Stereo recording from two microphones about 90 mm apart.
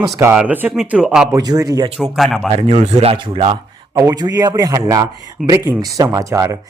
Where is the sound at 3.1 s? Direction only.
75° right (ahead or behind).